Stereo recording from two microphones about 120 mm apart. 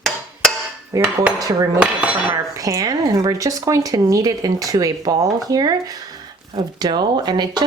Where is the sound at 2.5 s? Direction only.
30° right (ahead or behind).